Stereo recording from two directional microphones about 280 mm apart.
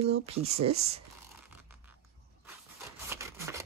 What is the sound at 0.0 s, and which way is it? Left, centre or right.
Speech, right.